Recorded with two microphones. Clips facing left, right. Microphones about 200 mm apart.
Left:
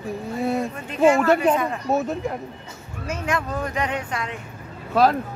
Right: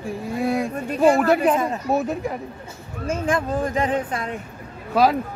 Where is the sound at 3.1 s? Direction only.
30° right (ahead or behind).